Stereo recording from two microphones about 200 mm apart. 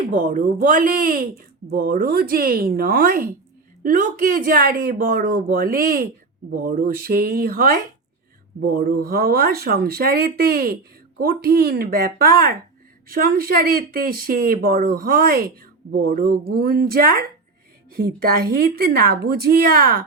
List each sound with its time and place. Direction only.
0.1 s speech: 40° right (ahead or behind)